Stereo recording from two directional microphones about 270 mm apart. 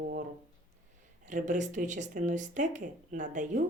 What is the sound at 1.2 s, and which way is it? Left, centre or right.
Speech, right.